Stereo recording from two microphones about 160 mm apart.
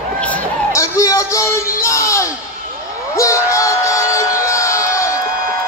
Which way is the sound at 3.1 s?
20° left (ahead or behind).